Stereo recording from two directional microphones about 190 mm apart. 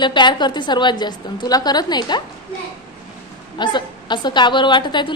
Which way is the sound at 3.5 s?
25° left (ahead or behind).